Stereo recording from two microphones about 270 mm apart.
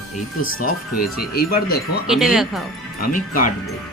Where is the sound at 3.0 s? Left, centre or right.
Left.